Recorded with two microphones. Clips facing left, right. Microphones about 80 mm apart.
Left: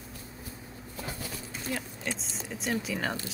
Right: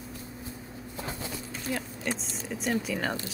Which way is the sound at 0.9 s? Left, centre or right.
Right.